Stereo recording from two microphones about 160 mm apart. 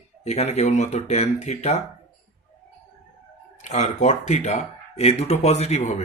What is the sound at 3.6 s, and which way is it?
Speech, 45° left (ahead or behind).